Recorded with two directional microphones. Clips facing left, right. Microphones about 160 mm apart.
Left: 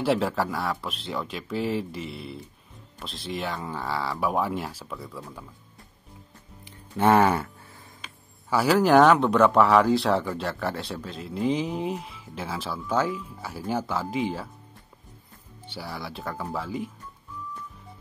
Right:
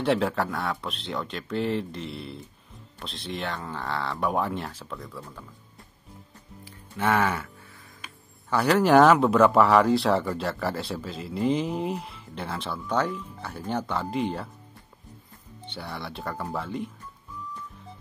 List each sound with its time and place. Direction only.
0.0 s speech: centre (ahead or behind)
6.6 s music: 30° left (ahead or behind)
8.5 s speech: 5° left (ahead or behind)
15.6 s speech: 5° left (ahead or behind)